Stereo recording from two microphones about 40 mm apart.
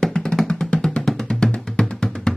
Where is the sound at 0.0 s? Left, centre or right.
Centre.